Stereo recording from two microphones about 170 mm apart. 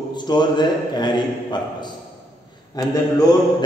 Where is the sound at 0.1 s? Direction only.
25° left (ahead or behind).